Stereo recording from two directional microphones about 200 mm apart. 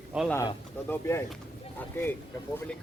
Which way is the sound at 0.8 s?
15° left (ahead or behind).